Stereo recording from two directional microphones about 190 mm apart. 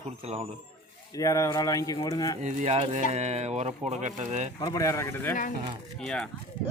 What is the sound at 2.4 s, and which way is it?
Speech, 40° right (ahead or behind).